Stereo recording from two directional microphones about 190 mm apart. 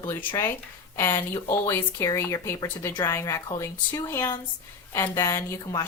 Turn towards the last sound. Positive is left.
turn(degrees=20)  # may be behind; listen again after turning